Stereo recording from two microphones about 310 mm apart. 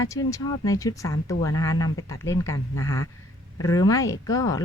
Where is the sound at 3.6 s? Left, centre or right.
Centre.